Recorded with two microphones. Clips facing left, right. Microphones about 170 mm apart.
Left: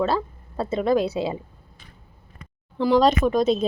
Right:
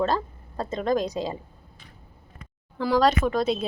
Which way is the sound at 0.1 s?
10° left (ahead or behind).